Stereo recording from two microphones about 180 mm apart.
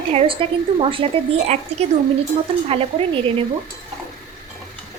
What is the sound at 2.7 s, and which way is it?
Speech, 35° right (ahead or behind).